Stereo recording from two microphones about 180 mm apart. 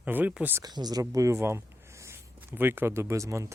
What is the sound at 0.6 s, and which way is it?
Speech, 20° right (ahead or behind).